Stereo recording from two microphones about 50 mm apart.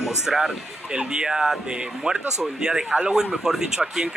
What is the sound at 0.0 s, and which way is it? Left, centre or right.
Speech, centre.